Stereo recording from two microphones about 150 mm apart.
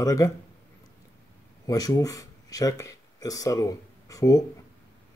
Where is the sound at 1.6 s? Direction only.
25° left (ahead or behind).